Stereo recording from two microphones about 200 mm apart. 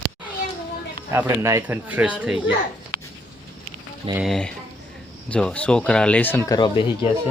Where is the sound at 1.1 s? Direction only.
15° right (ahead or behind).